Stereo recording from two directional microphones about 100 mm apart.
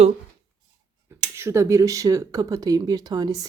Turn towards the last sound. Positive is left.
turn(degrees=-40)  # may be behind; listen again after turning